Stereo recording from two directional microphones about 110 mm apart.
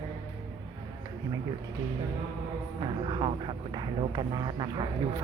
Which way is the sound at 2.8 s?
50° right (ahead or behind).